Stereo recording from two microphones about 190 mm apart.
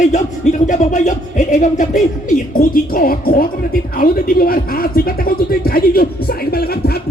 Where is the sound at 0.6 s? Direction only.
40° left (ahead or behind).